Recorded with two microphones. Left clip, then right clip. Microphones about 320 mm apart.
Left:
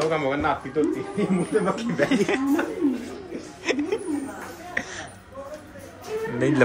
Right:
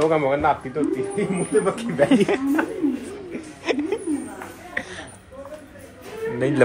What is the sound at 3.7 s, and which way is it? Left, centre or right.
Music, centre.